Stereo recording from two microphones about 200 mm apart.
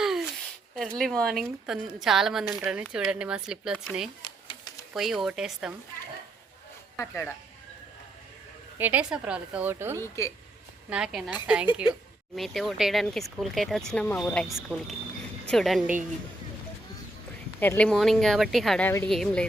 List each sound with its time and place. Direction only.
0.0 s a sound: centre (ahead or behind)
0.8 s speech: centre (ahead or behind)
4.2 s typewriter: 20° left (ahead or behind)
4.9 s speech: centre (ahead or behind)
6.9 s speech: 10° left (ahead or behind)
8.8 s a woman's voice: 5° right (ahead or behind)
10.0 s speech: 15° left (ahead or behind)
10.8 s speech: 5° right (ahead or behind)
17.6 s speech: 10° left (ahead or behind)